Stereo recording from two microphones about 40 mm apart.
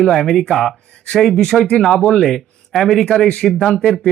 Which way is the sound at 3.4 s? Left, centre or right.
Centre.